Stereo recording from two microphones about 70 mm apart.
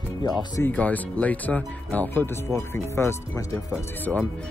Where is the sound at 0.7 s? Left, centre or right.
Left.